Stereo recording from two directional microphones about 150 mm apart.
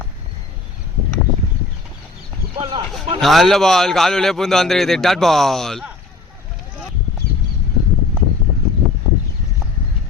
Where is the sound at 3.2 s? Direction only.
Centre (ahead or behind).